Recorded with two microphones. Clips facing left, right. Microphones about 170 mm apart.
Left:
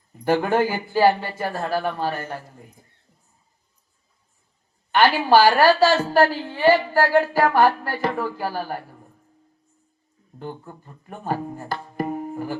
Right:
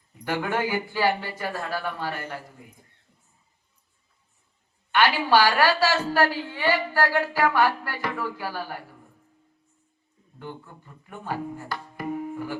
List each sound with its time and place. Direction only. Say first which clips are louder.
0.1 s a woman's voice: left 7 dB; 45° left (ahead or behind)
1.5 s speech: left 6 dB; 25° left (ahead or behind)
4.9 s a woman's voice: left 4 dB; 50° left (ahead or behind)
10.3 s speech: left 4 dB; 40° left (ahead or behind)